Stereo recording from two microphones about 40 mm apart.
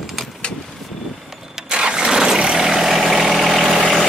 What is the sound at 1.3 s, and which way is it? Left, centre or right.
Vehicle, centre.